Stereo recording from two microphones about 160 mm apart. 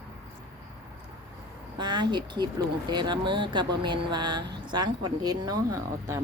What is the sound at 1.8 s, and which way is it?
A woman's voice, 25° right (ahead or behind).